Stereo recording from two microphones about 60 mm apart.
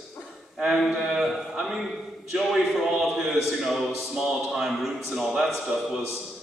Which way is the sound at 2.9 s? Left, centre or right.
Centre.